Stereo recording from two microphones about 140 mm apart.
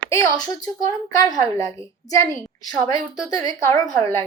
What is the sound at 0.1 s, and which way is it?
A woman's voice, 25° left (ahead or behind).